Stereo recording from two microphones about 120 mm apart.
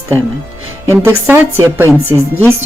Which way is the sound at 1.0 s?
20° right (ahead or behind).